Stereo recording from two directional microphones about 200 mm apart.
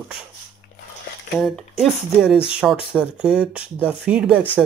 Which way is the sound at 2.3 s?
25° left (ahead or behind).